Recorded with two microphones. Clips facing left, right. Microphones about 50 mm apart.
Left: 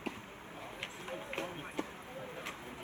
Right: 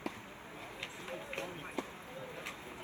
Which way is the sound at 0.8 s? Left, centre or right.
Left.